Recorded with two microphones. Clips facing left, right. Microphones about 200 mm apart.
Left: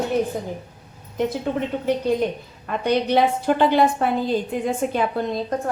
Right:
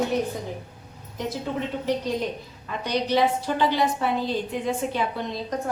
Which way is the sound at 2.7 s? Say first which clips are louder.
Left 5 dB; 55° left (ahead or behind).